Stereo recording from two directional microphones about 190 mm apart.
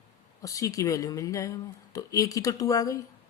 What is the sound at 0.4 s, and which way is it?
A woman's voice, 15° left (ahead or behind).